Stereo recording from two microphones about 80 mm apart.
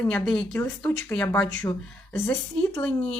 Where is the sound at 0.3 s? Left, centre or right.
Centre.